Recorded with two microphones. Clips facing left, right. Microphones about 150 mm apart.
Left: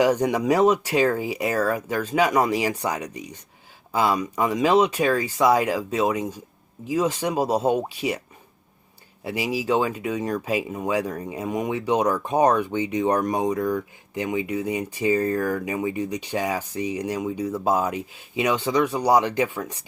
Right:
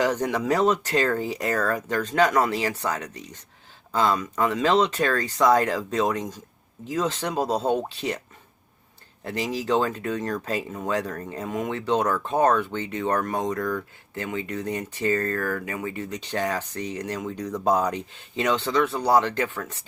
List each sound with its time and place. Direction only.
0.0 s speech: 10° left (ahead or behind)
9.2 s speech: 10° left (ahead or behind)